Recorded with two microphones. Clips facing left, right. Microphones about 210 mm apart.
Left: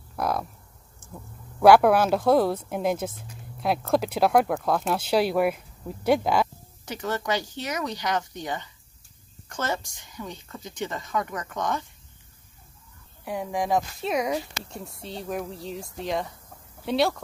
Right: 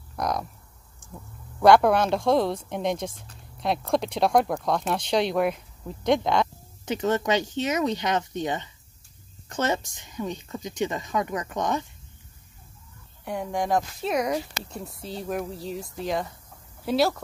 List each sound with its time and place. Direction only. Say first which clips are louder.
0.1 s speech: left 1 dB; 5° left (ahead or behind)
1.6 s speech: left 1 dB; 5° left (ahead or behind)
6.9 s speech: right 4 dB; 20° right (ahead or behind)
13.2 s speech: even; centre (ahead or behind)